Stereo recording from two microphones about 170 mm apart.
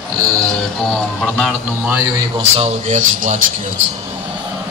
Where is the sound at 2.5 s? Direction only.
40° right (ahead or behind).